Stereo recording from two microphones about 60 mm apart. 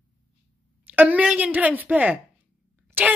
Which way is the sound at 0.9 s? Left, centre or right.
Right.